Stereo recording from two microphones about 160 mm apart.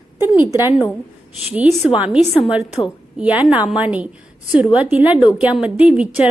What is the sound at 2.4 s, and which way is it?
A woman's voice, 5° right (ahead or behind).